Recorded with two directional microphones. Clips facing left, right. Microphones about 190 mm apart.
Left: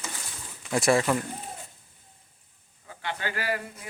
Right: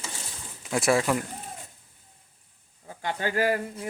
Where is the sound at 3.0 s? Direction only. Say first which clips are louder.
Right 6 dB; 45° right (ahead or behind).